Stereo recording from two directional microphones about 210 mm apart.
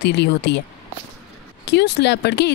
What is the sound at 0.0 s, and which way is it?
Speech, 55° left (ahead or behind).